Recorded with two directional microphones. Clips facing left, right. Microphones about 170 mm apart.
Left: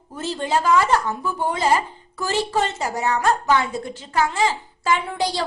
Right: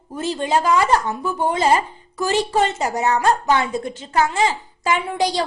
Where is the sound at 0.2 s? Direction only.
15° right (ahead or behind).